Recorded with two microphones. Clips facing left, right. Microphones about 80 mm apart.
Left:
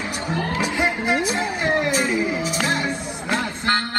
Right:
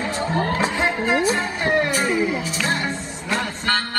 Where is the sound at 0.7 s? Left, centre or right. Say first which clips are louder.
Right 1 dB; centre.